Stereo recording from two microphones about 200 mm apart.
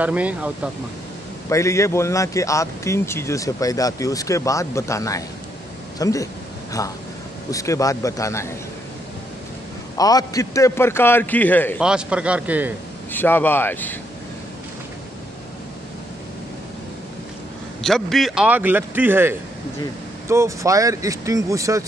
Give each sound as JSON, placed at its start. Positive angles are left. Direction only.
{"t": 0.0, "sound": "speech", "side_deg": -5}
{"t": 1.5, "sound": "a man's voice", "side_deg": 15}
{"t": 9.9, "sound": "a man's voice", "side_deg": 20}
{"t": 11.8, "sound": "a man's voice", "side_deg": -5}
{"t": 13.1, "sound": "a man's voice", "side_deg": 10}
{"t": 17.8, "sound": "speech", "side_deg": 0}